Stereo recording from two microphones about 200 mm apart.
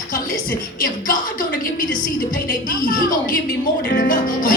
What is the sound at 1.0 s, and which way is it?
A woman's voice, 45° left (ahead or behind).